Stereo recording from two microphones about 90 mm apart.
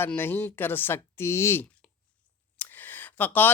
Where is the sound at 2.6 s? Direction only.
20° left (ahead or behind).